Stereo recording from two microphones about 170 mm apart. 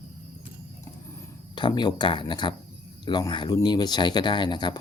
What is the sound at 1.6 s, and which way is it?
Speech, 25° left (ahead or behind).